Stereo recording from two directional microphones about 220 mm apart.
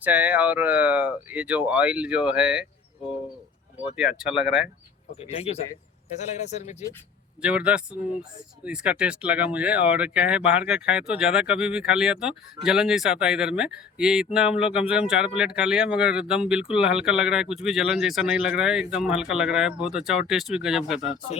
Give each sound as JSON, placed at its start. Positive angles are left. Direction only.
{"t": 0.0, "sound": "speech", "side_deg": -5}
{"t": 3.9, "sound": "speech", "side_deg": -5}
{"t": 5.3, "sound": "a man's voice", "side_deg": 30}
{"t": 7.4, "sound": "speech", "side_deg": -5}